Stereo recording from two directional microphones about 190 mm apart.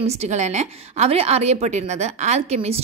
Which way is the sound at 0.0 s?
35° right (ahead or behind).